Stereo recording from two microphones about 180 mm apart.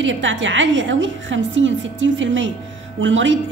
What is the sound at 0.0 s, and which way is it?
A woman's voice, 90° right.